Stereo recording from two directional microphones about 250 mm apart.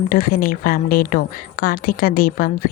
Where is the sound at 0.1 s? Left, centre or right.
Left.